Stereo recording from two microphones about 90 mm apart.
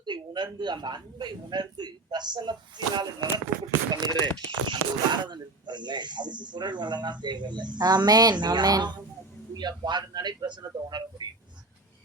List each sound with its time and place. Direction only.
0.0 s speech: 55° right (ahead or behind)